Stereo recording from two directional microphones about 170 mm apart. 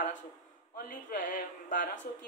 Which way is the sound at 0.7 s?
55° left (ahead or behind).